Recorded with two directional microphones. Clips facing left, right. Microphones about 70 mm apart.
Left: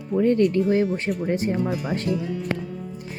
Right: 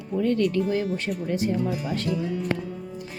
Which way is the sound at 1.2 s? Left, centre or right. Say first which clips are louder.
Left 1 dB; left.